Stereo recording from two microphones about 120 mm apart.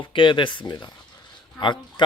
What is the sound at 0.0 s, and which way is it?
Speech, 45° left (ahead or behind).